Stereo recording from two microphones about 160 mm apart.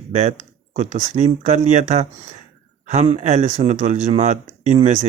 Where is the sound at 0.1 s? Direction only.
45° right (ahead or behind).